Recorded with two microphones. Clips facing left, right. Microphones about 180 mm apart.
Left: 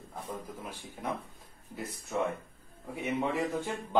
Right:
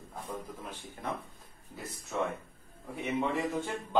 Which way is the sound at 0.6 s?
10° left (ahead or behind).